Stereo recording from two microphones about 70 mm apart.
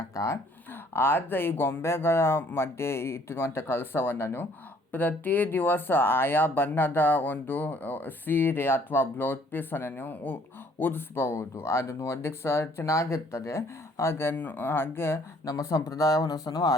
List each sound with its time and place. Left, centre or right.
0.9 s speech: left
14.3 s speech: left
15.4 s speech: left